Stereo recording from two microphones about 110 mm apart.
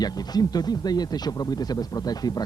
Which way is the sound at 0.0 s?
35° left (ahead or behind).